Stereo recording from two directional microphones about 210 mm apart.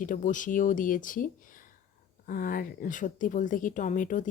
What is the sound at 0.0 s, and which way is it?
A woman's voice, 40° left (ahead or behind).